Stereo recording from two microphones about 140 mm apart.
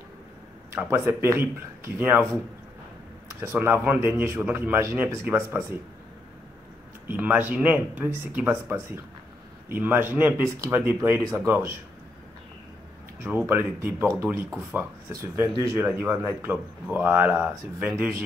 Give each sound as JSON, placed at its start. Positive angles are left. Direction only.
{"t": 0.7, "sound": "a man's voice", "side_deg": -15}
{"t": 3.3, "sound": "a man's voice", "side_deg": -15}
{"t": 7.1, "sound": "a man's voice", "side_deg": -10}
{"t": 13.8, "sound": "a man's voice", "side_deg": -15}